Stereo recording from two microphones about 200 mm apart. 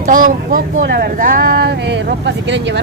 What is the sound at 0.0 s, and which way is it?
Speech, 40° right (ahead or behind).